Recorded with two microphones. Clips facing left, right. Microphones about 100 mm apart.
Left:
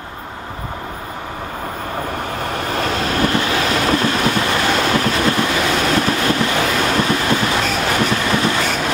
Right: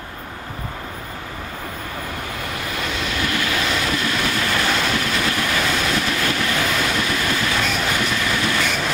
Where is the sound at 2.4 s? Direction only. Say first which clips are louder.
Left 7 dB; 40° left (ahead or behind).